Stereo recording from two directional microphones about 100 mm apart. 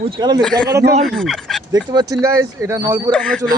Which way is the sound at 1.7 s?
40° right (ahead or behind).